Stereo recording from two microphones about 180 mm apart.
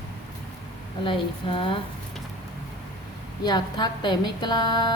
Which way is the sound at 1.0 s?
30° left (ahead or behind).